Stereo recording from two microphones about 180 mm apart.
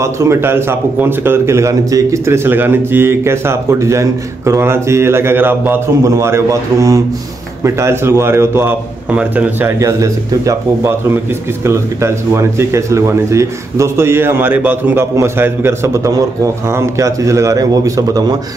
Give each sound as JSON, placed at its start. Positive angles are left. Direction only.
{"t": 0.0, "sound": "speech", "side_deg": -15}